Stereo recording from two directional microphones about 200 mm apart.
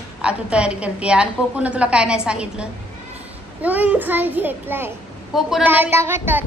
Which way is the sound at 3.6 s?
5° right (ahead or behind).